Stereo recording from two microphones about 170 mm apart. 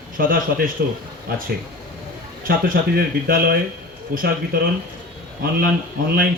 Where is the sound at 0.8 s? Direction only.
75° right (ahead or behind).